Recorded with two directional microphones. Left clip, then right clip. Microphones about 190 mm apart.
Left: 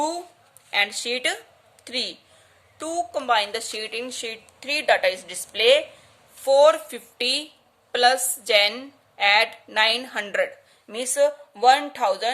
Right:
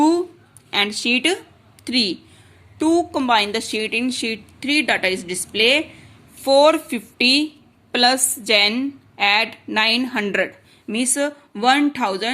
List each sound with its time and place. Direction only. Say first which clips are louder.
0.7 s a woman's voice: right 4 dB; 10° right (ahead or behind)